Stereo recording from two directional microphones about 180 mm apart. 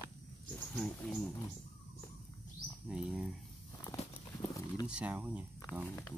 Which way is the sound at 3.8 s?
20° left (ahead or behind).